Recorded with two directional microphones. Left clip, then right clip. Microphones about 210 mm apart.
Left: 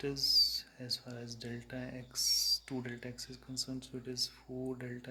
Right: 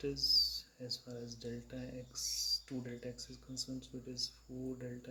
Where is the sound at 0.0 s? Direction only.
30° left (ahead or behind).